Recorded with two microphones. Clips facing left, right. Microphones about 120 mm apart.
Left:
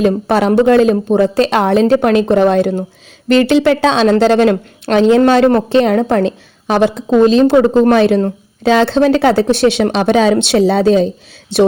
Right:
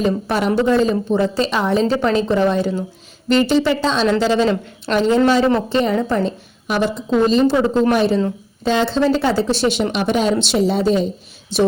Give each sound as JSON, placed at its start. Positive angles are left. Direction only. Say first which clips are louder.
{"t": 0.3, "sound": "a woman's voice", "louder": "left 7 dB", "side_deg": 70}